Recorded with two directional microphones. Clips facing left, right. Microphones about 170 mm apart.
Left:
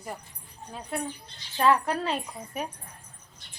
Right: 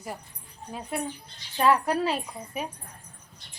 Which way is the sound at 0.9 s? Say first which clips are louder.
Even; 10° right (ahead or behind).